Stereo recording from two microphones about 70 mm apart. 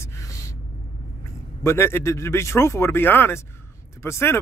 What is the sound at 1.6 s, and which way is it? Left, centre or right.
Speech, left.